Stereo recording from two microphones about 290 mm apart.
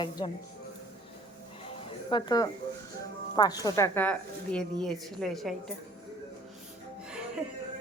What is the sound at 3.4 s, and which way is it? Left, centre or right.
Speech, centre.